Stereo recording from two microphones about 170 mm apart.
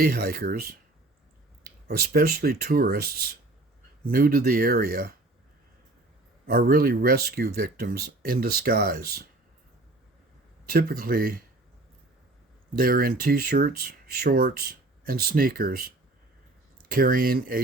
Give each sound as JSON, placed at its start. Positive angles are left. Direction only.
{"t": 0.0, "sound": "speech", "side_deg": -60}
{"t": 1.9, "sound": "speech", "side_deg": -60}
{"t": 6.5, "sound": "speech", "side_deg": -55}
{"t": 10.7, "sound": "speech", "side_deg": -60}
{"t": 12.7, "sound": "speech", "side_deg": -55}
{"t": 16.9, "sound": "speech", "side_deg": -55}